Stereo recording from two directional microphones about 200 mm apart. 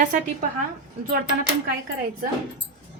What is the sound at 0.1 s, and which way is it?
Speech, 40° right (ahead or behind).